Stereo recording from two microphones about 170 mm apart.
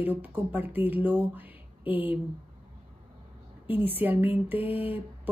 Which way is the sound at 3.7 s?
10° right (ahead or behind).